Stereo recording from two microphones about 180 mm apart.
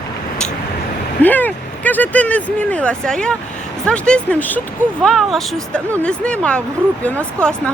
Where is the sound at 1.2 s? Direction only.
10° left (ahead or behind).